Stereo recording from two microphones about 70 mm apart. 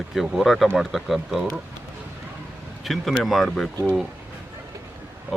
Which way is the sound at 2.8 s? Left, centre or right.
Centre.